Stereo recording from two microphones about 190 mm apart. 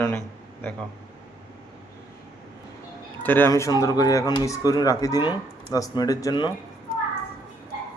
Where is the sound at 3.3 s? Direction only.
10° left (ahead or behind).